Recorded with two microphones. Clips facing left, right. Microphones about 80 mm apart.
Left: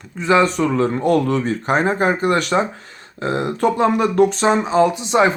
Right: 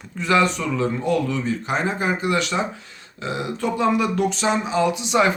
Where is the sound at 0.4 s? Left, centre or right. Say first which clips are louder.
Left 5 dB; left.